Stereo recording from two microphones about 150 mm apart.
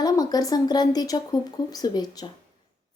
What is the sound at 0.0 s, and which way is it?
A woman's voice, 25° left (ahead or behind).